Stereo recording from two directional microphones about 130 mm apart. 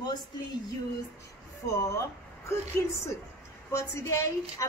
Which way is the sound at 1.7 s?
25° left (ahead or behind).